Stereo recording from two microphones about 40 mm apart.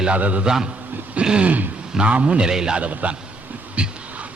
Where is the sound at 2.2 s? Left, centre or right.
Right.